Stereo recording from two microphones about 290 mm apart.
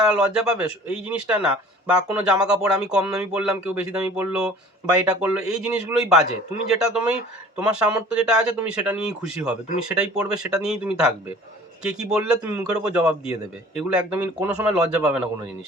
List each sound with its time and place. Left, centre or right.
0.1 s speech: centre